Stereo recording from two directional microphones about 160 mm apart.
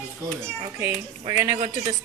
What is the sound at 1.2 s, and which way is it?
Speech, 15° right (ahead or behind).